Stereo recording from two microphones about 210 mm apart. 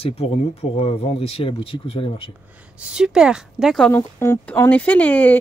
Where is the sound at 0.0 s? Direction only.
30° left (ahead or behind).